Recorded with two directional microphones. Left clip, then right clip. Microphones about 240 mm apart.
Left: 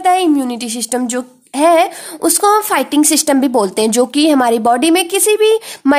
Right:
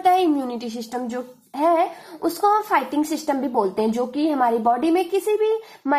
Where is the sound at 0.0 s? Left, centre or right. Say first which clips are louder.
Left 6 dB; left.